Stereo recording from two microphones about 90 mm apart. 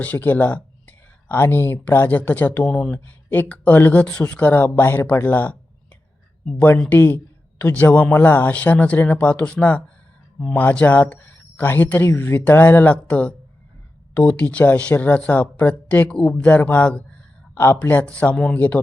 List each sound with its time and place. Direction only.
0.0 s speech: 20° left (ahead or behind)
17.5 s speech: 25° left (ahead or behind)